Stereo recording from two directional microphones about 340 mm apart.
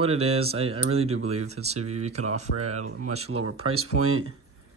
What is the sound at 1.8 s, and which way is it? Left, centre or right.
Speech, right.